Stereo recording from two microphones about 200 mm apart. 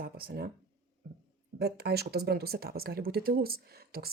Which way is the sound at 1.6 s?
55° right (ahead or behind).